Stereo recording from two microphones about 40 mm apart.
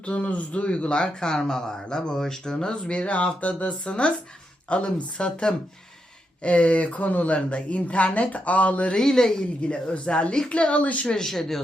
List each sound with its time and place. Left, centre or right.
0.0 s speech: left
9.0 s speech: centre; by 11.0 s left
11.0 s speech: centre